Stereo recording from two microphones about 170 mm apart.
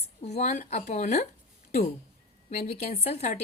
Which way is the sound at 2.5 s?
40° left (ahead or behind).